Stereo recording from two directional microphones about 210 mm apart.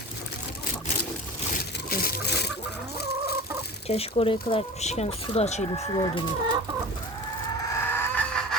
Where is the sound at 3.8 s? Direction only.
30° left (ahead or behind).